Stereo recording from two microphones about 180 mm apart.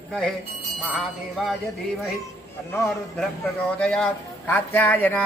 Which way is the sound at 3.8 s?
5° left (ahead or behind).